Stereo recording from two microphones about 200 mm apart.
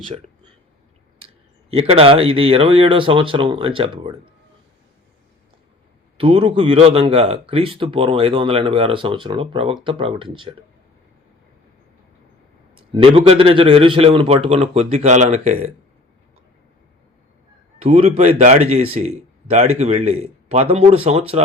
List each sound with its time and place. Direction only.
1.7 s speech: 30° right (ahead or behind)
6.1 s speech: 30° right (ahead or behind)
12.7 s speech: 25° right (ahead or behind)
17.7 s a man's voice: 30° right (ahead or behind)